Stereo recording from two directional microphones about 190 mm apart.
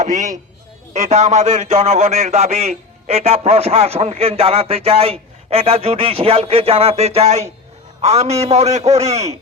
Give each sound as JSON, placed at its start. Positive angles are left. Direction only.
{"t": 0.0, "sound": "a man's voice", "side_deg": -40}